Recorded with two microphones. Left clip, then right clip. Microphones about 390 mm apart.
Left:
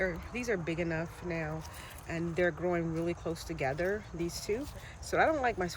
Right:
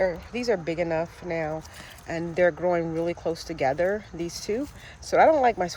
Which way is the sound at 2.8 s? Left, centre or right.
Right.